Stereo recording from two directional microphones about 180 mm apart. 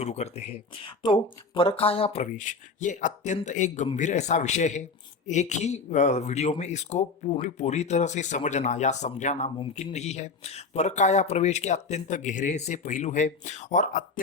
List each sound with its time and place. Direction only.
0.0 s speech: 35° left (ahead or behind)